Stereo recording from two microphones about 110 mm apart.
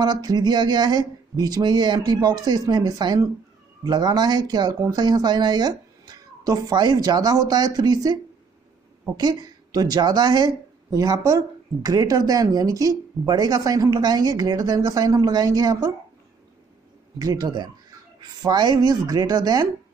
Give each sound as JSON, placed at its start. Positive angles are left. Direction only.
{"t": 0.0, "sound": "a woman's voice", "side_deg": -40}
{"t": 17.2, "sound": "a woman's voice", "side_deg": -35}